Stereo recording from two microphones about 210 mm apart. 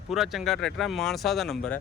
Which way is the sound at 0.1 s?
Centre (ahead or behind).